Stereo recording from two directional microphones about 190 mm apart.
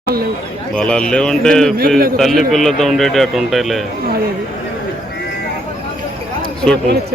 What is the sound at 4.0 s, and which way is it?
Speech, 50° right (ahead or behind).